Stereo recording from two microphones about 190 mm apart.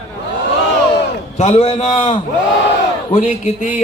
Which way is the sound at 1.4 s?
35° left (ahead or behind).